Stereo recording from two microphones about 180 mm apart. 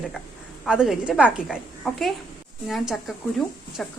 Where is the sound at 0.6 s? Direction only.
5° right (ahead or behind).